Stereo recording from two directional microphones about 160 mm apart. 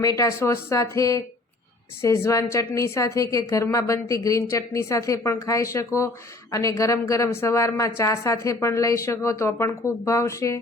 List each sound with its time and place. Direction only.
0.0 s a woman's voice: 20° left (ahead or behind)